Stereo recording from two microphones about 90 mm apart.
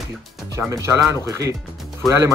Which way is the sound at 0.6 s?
30° right (ahead or behind).